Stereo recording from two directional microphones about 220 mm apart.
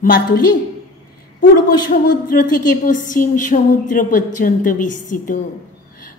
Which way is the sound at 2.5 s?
35° left (ahead or behind).